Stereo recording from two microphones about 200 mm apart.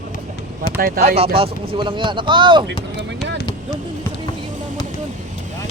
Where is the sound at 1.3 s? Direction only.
30° right (ahead or behind).